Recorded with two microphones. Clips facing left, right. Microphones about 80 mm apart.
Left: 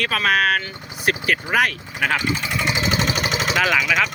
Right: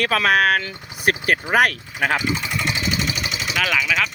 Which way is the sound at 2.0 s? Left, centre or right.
Centre.